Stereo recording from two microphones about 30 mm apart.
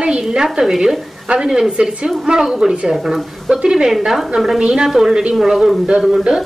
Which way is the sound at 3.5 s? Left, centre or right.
Right.